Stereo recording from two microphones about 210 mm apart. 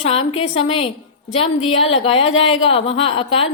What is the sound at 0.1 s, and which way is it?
A woman's voice, 25° left (ahead or behind).